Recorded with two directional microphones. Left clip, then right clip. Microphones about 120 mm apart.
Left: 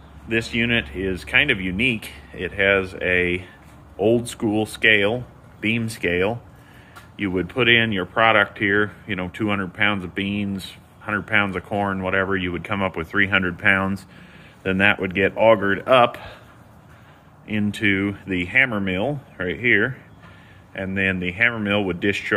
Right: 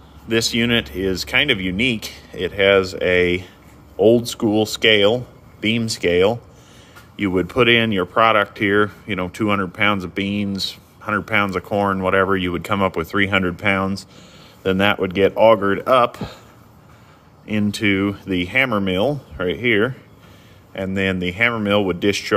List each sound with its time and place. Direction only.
0.3 s speech: 55° right (ahead or behind); by 16.3 s 35° right (ahead or behind)
17.5 s speech: 40° right (ahead or behind)